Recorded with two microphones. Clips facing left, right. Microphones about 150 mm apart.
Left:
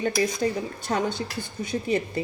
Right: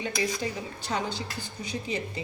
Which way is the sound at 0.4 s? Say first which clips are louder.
Left 7 dB; 50° left (ahead or behind).